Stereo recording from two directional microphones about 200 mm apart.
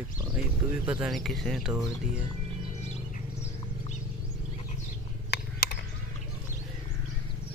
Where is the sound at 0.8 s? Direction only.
5° right (ahead or behind).